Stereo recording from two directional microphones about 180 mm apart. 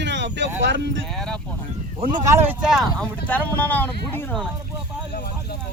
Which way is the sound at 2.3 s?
10° right (ahead or behind).